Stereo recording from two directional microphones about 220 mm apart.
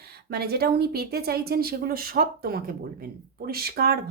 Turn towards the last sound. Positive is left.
turn(degrees=-45)  # may be behind; listen again after turning